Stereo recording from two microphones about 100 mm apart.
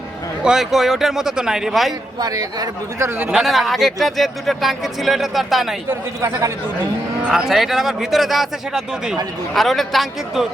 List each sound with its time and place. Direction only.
0.4 s speech: 5° right (ahead or behind)
2.1 s speech: 40° right (ahead or behind)
3.2 s speech: 10° right (ahead or behind)
3.4 s speech: centre (ahead or behind)
5.9 s speech: 30° right (ahead or behind)
7.3 s speech: 5° right (ahead or behind)